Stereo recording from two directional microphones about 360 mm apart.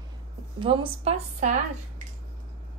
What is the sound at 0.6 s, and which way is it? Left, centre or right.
A woman's voice, centre.